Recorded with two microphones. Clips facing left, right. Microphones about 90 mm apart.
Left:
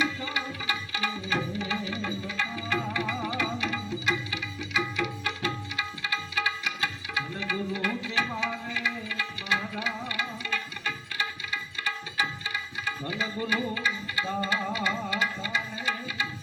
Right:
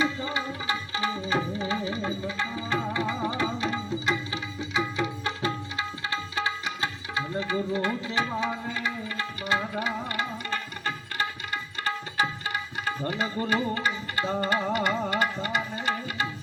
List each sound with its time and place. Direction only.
0.0 s music: 30° right (ahead or behind)
12.5 s music: 55° right (ahead or behind)
14.3 s music: 55° right (ahead or behind)